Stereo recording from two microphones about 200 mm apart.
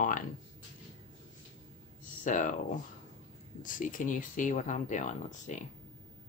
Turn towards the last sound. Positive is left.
turn(degrees=40)  # may be behind; listen again after turning